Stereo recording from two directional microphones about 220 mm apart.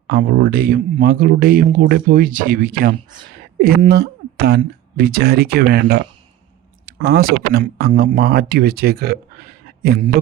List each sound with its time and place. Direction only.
0.1 s speech: 40° right (ahead or behind)